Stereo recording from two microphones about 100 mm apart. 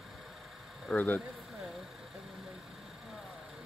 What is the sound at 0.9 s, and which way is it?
Speech, 20° left (ahead or behind).